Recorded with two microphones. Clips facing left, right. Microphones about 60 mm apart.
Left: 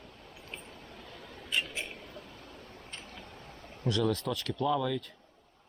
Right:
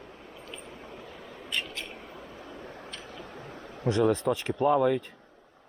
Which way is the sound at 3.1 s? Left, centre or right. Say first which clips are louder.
Right 6 dB; right.